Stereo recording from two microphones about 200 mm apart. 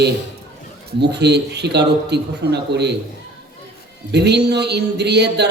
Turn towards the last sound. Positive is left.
turn(degrees=-55)  # may be behind; listen again after turning